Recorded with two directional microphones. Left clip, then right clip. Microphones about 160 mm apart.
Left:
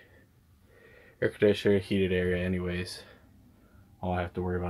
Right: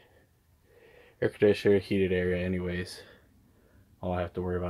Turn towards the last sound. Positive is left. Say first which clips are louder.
# even
turn(degrees=-15)  # may be behind; listen again after turning